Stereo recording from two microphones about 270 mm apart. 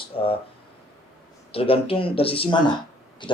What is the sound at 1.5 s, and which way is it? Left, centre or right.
Speech, left.